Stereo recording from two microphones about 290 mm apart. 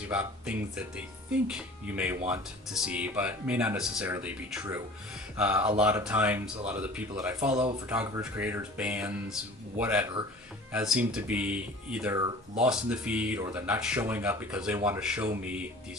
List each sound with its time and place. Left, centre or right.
0.1 s speech: centre
7.9 s speech: centre